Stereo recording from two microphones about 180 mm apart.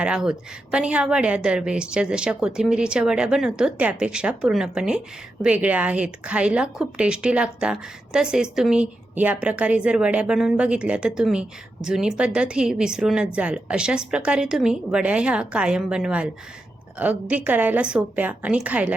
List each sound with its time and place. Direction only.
0.0 s a woman's voice: 5° right (ahead or behind)